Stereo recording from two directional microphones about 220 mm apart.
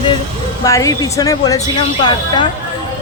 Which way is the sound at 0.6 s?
15° left (ahead or behind).